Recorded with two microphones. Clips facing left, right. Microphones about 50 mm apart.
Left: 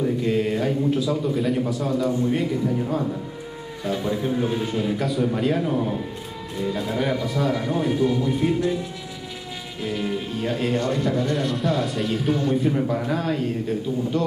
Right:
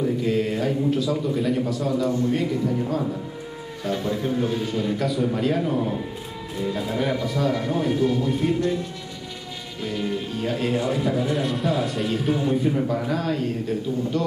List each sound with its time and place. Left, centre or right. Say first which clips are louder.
0.0 s a man's voice: left 1 dB; centre
2.1 s a man's voice: even; centre
2.5 s speech: even; centre
9.8 s a man's voice: left 1 dB; centre
12.7 s speech: even; centre